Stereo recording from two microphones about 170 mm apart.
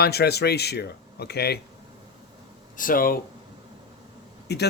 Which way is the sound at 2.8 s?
55° left (ahead or behind).